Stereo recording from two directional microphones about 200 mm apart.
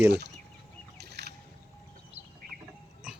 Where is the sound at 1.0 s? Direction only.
55° right (ahead or behind).